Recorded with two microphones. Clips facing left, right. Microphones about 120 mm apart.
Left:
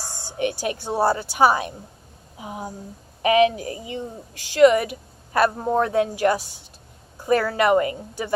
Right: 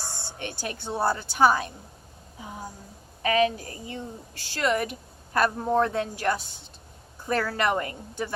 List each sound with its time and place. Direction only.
0.1 s speech: 15° left (ahead or behind)
7.5 s speech: 10° left (ahead or behind)